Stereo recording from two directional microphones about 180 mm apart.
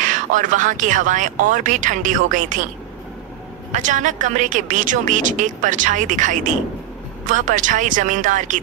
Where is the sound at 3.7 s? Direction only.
45° right (ahead or behind).